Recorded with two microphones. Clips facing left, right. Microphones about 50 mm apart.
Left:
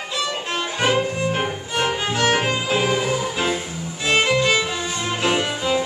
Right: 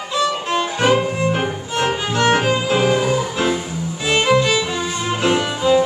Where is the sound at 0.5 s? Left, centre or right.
Centre.